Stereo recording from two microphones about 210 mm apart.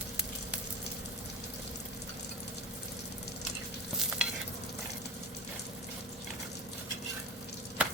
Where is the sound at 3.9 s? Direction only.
Centre (ahead or behind).